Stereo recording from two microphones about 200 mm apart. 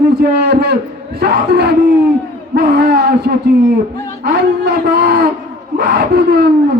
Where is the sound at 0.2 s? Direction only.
55° right (ahead or behind).